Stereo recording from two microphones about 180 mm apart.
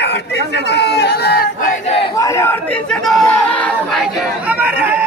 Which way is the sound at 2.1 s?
15° left (ahead or behind).